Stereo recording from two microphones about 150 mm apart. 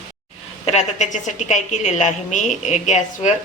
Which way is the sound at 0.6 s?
50° left (ahead or behind).